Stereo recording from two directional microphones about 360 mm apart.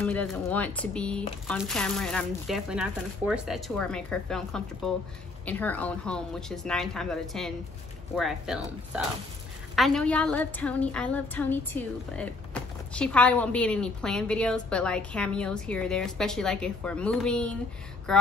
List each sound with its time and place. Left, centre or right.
0.0 s a woman's voice: centre